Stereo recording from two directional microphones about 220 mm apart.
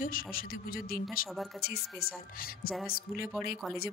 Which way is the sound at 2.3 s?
40° left (ahead or behind).